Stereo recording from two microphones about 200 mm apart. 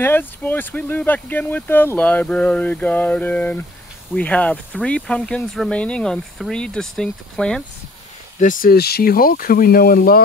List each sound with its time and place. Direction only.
0.0 s speech: 10° left (ahead or behind)
8.4 s speech: 40° left (ahead or behind)